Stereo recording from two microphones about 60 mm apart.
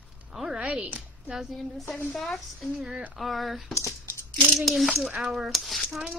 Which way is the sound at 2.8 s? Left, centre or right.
Centre.